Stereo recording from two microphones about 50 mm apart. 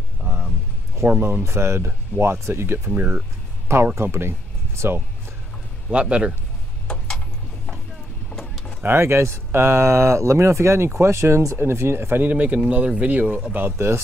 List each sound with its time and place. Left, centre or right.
1.2 s speech: right
3.0 s speech: right
3.9 s speech: right
5.9 s speech: right
8.3 s vehicle: centre
8.8 s speech: right
12.2 s speech: right
13.7 s speech: right